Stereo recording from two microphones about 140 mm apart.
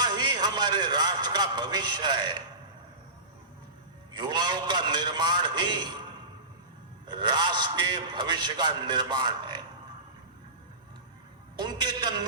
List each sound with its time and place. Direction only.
0.0 s a man's voice: 30° right (ahead or behind)
4.2 s a man's voice: 30° right (ahead or behind)
11.5 s a man's voice: 30° right (ahead or behind)